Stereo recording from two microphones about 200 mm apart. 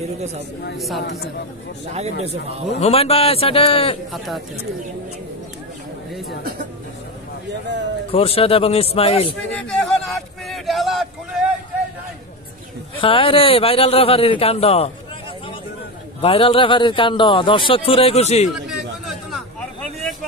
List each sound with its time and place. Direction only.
0.7 s speech: centre (ahead or behind)
2.0 s speech: 30° right (ahead or behind)
2.8 s speech: 30° left (ahead or behind)
8.1 s speech: 30° left (ahead or behind)
9.6 s a sound: 5° left (ahead or behind)
12.9 s speech: 25° left (ahead or behind)
16.2 s speech: 30° left (ahead or behind)
18.5 s a sound: centre (ahead or behind)